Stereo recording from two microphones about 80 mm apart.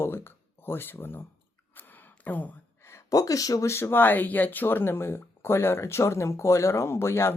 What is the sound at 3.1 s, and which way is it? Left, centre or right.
Speech, left.